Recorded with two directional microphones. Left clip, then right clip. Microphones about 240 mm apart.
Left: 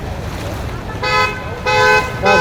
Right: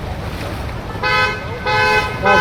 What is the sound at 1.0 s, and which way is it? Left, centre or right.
Toot, left.